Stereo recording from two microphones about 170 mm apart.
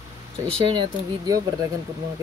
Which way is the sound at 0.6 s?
30° right (ahead or behind).